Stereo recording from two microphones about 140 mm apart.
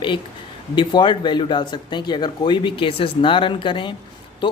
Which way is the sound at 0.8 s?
30° left (ahead or behind).